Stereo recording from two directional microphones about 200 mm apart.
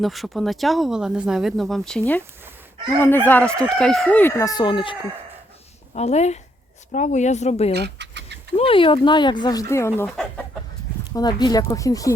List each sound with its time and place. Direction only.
0.0 s speech: centre (ahead or behind)
3.0 s speech: 10° left (ahead or behind); by 7.7 s 35° left (ahead or behind)
7.7 s a sound: 55° right (ahead or behind)
8.5 s speech: 25° left (ahead or behind)
11.1 s speech: 20° left (ahead or behind)